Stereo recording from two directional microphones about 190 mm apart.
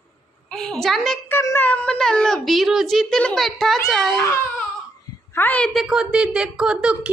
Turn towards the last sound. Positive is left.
turn(degrees=-5)  # may be behind; listen again after turning